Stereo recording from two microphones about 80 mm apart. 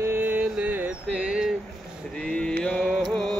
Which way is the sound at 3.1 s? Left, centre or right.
Centre.